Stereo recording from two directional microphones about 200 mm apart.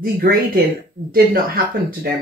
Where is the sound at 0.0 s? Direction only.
50° right (ahead or behind).